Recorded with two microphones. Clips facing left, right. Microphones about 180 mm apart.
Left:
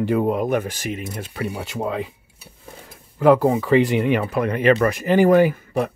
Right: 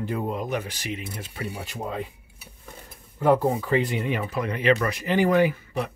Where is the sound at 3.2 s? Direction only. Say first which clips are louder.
Left 6 dB; 90° left.